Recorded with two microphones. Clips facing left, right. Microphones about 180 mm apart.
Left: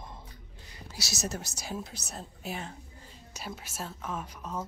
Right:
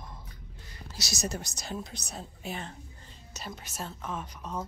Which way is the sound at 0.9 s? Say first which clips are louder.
Right 1 dB; 5° left (ahead or behind).